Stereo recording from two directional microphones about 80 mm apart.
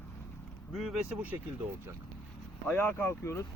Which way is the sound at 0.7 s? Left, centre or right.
Centre.